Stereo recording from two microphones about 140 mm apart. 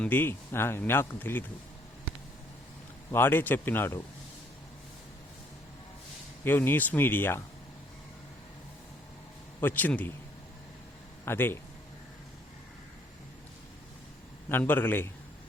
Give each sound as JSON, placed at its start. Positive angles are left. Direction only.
{"t": 0.0, "sound": "a man's voice", "side_deg": 15}
{"t": 3.1, "sound": "a man's voice", "side_deg": 15}
{"t": 6.4, "sound": "a man's voice", "side_deg": 15}
{"t": 9.6, "sound": "a man's voice", "side_deg": 15}
{"t": 11.3, "sound": "a man's voice", "side_deg": 15}
{"t": 14.5, "sound": "a man's voice", "side_deg": 15}